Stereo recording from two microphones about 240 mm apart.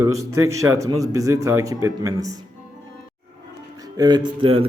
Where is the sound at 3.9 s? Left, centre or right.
Centre.